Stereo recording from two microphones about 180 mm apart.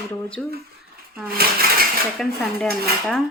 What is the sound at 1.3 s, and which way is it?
Speech, 55° right (ahead or behind).